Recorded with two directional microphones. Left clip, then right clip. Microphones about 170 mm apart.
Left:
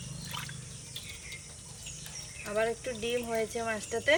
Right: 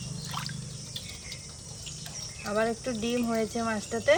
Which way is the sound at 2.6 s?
55° right (ahead or behind).